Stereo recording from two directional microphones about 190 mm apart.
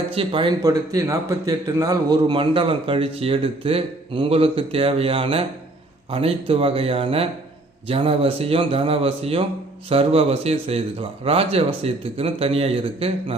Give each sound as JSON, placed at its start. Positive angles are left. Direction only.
{"t": 0.1, "sound": "a man's voice", "side_deg": -30}